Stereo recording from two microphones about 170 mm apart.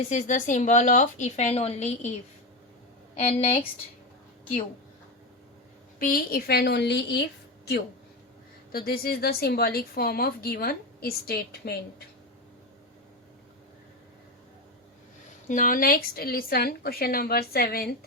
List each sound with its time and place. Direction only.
0.1 s a woman's voice: 45° left (ahead or behind)
3.2 s a woman's voice: 40° left (ahead or behind)
6.0 s a woman's voice: 55° left (ahead or behind); by 7.8 s 75° left (ahead or behind)
8.7 s speech: 60° left (ahead or behind)
15.4 s speech: 50° left (ahead or behind)